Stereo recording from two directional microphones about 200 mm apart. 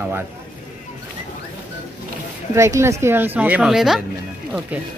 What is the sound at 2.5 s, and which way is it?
A woman's voice, 15° right (ahead or behind).